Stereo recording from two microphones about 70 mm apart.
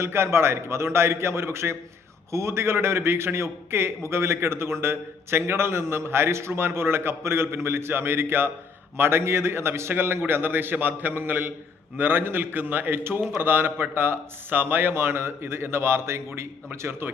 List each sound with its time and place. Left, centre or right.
0.0 s a man's voice: right